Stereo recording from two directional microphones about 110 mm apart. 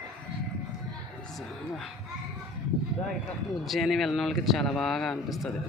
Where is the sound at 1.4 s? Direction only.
Centre (ahead or behind).